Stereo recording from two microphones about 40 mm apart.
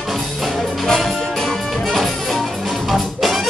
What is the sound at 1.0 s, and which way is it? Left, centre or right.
Music, centre.